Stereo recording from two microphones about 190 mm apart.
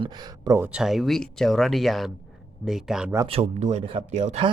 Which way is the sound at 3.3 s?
35° right (ahead or behind).